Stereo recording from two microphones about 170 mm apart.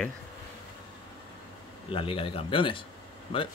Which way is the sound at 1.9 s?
30° left (ahead or behind).